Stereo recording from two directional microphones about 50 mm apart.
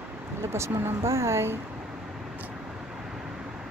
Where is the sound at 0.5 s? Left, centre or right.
Right.